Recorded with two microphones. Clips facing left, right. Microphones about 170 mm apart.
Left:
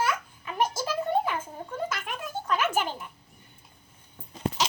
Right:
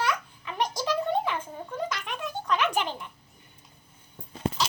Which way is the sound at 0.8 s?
45° left (ahead or behind).